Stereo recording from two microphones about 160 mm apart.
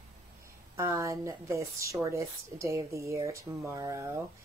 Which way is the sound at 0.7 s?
15° right (ahead or behind).